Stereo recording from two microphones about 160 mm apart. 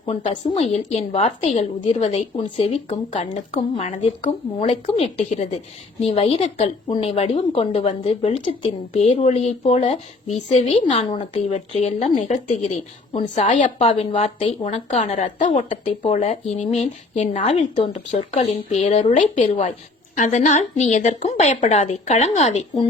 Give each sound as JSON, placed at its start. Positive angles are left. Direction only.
{"t": 0.0, "sound": "a woman's voice", "side_deg": 35}